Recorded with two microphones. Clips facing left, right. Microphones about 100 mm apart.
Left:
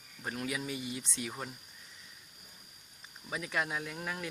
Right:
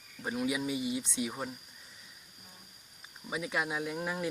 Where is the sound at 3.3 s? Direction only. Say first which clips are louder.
Right 1 dB; 15° right (ahead or behind).